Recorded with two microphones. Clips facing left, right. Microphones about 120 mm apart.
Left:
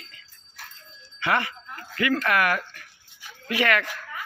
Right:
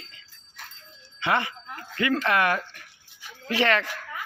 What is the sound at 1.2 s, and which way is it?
Speech, 20° right (ahead or behind).